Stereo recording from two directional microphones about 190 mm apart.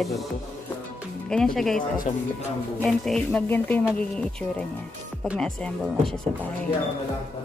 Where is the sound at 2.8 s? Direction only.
Centre (ahead or behind).